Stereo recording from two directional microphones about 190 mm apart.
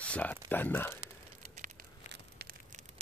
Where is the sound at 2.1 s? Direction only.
55° right (ahead or behind).